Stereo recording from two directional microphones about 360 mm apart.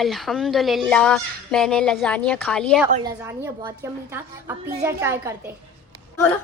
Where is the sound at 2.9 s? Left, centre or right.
Centre.